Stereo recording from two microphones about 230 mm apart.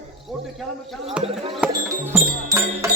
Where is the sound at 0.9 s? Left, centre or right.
Centre.